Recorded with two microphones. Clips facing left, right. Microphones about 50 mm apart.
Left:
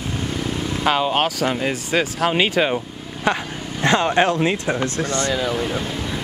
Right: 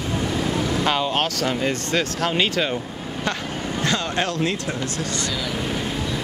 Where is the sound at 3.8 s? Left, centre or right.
Left.